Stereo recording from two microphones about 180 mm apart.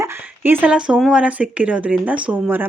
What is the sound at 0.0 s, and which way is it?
Speech, 10° right (ahead or behind).